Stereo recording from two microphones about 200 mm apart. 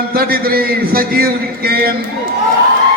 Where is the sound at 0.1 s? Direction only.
50° right (ahead or behind).